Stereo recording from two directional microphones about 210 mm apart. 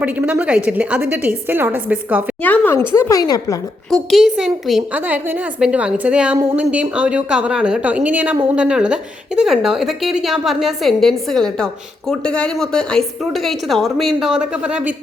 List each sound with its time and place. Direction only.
0.0 s a woman's voice: 5° right (ahead or behind)
2.4 s a woman's voice: 10° left (ahead or behind)
3.8 s a woman's voice: centre (ahead or behind)